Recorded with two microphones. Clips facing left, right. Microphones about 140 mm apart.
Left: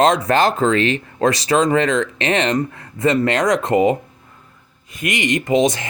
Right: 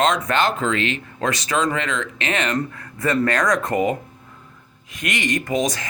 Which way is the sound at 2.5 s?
20° left (ahead or behind).